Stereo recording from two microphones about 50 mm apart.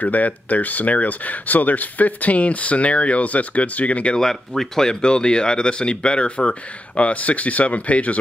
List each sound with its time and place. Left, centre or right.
0.0 s speech: left
4.2 s speech: centre; by 8.2 s left